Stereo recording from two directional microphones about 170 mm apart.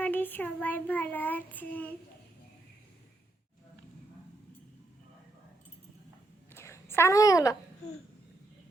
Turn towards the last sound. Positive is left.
turn(degrees=20)  # may be behind; listen again after turning